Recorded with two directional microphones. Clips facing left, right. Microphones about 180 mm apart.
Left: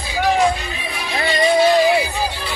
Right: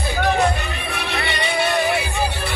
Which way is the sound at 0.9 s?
65° right (ahead or behind).